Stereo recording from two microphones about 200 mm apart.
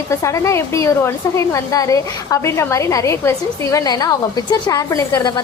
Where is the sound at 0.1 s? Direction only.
15° left (ahead or behind).